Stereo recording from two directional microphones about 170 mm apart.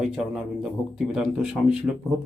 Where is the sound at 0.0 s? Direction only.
5° right (ahead or behind).